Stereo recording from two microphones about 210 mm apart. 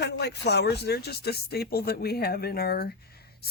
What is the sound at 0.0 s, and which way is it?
Speech, 50° left (ahead or behind).